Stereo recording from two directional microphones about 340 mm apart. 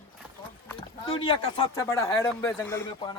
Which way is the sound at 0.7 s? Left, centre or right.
Centre.